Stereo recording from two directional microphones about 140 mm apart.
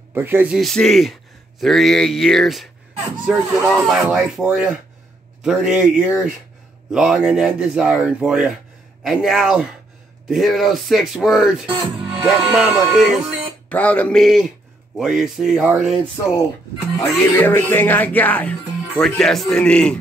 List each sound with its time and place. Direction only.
0.1 s speech: 15° right (ahead or behind)
0.6 s speech: centre (ahead or behind)
11.6 s speech: 40° right (ahead or behind)
12.2 s speech: 5° right (ahead or behind)
13.7 s speech: 10° left (ahead or behind); by 15.9 s 5° right (ahead or behind)
17.4 s speech: 15° left (ahead or behind)